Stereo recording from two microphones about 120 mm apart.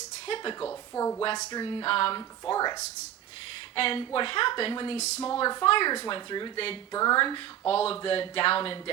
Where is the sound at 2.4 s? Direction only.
35° left (ahead or behind).